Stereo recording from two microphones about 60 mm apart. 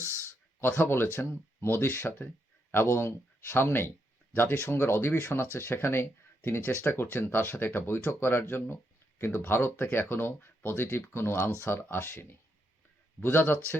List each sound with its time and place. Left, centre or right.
0.6 s speech: left